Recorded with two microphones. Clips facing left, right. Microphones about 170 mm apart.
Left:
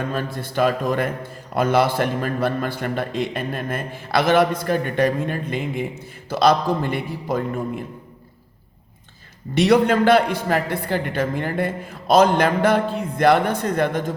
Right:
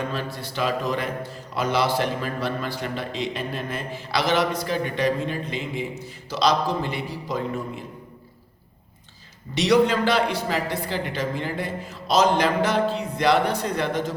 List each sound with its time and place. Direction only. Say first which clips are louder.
0.1 s a man's voice: left 4 dB; 50° left (ahead or behind)
9.6 s a man's voice: left 3 dB; 55° left (ahead or behind)